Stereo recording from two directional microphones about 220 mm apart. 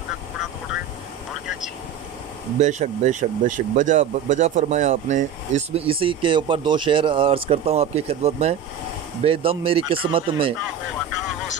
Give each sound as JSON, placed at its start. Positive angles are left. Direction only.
{"t": 2.6, "sound": "speech", "side_deg": -35}